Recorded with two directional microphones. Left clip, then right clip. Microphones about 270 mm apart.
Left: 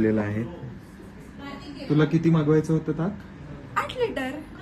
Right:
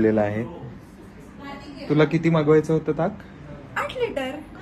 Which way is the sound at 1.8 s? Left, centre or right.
Right.